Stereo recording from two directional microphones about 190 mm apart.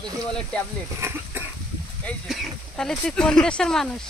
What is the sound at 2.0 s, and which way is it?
Speech, centre (ahead or behind).